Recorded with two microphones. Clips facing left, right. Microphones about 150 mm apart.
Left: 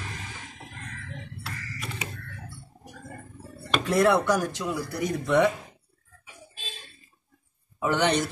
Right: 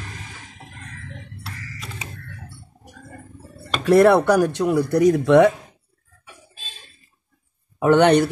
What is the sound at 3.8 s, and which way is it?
Speech, 65° right (ahead or behind).